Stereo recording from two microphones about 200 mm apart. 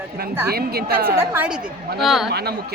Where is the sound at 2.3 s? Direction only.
50° right (ahead or behind).